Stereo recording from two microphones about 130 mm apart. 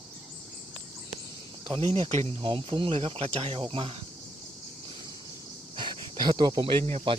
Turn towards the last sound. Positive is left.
turn(degrees=-45)  # may be behind; listen again after turning